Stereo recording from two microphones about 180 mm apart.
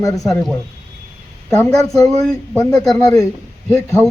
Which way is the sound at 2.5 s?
5° left (ahead or behind).